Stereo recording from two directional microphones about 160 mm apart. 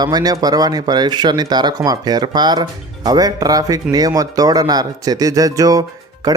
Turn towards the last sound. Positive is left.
turn(degrees=-25)  # may be behind; listen again after turning